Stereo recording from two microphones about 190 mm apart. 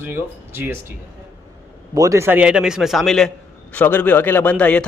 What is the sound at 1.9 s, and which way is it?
A man's voice, 15° right (ahead or behind).